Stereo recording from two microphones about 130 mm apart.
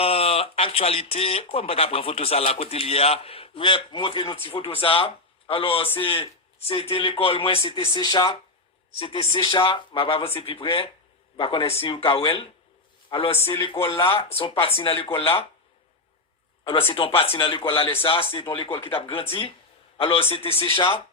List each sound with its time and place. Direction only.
0.0 s speech: 50° left (ahead or behind)
7.9 s speech: 35° left (ahead or behind)
9.0 s speech: 45° left (ahead or behind)
16.6 s speech: 45° left (ahead or behind)